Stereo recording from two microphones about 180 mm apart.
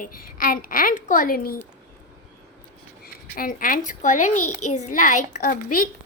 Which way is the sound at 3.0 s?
55° left (ahead or behind).